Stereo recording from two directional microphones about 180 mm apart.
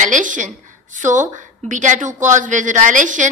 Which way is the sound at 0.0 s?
45° right (ahead or behind).